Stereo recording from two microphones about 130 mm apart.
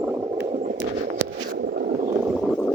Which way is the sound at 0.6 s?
75° right (ahead or behind).